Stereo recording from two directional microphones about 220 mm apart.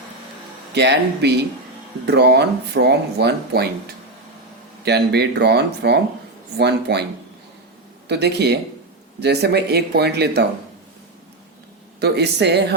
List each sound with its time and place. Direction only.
0.7 s speech: 50° right (ahead or behind)
4.9 s speech: 50° right (ahead or behind)
8.0 s speech: 50° right (ahead or behind)
11.9 s speech: 50° right (ahead or behind)